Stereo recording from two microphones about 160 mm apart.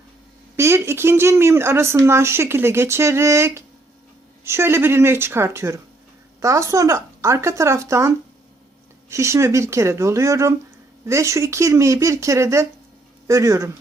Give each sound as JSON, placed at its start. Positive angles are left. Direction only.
{"t": 0.5, "sound": "speech", "side_deg": -15}